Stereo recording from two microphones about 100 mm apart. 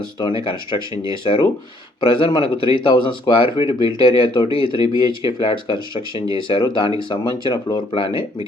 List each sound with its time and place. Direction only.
0.2 s speech: 60° left (ahead or behind)